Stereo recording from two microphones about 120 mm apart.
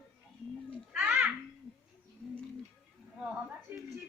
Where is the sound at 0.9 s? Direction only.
5° right (ahead or behind).